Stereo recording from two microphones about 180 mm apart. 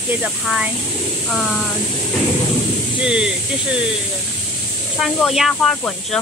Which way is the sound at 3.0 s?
5° right (ahead or behind).